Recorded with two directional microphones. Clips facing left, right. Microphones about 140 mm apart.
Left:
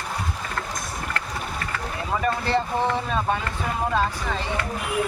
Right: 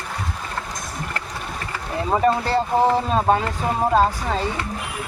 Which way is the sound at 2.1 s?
35° right (ahead or behind).